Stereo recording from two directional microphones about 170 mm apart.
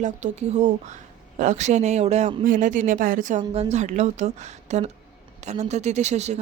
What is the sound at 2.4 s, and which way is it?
A woman's voice, 50° right (ahead or behind).